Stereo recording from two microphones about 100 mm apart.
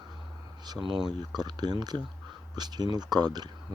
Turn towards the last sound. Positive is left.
turn(degrees=-45)  # may be behind; listen again after turning